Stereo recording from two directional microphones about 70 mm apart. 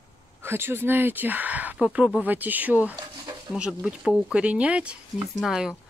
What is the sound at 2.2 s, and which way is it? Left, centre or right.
Speech, right.